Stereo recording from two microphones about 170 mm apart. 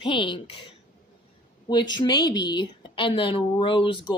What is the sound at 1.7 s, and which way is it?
Speech, 25° left (ahead or behind).